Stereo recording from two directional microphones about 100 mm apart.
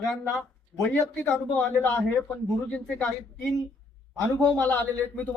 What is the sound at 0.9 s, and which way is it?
Speech, 15° left (ahead or behind).